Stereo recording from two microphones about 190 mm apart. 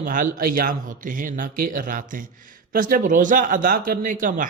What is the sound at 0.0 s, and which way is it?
Speech, 45° right (ahead or behind).